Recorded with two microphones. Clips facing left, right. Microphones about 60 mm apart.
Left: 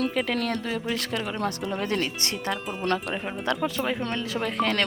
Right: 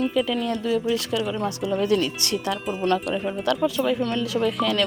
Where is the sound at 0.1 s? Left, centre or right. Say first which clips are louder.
Right 3 dB; left.